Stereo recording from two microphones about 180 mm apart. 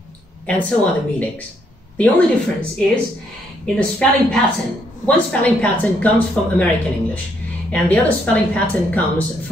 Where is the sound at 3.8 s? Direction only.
5° left (ahead or behind).